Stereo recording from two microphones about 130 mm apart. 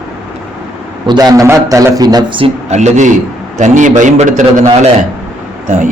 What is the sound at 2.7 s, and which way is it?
A man's voice, 60° right (ahead or behind).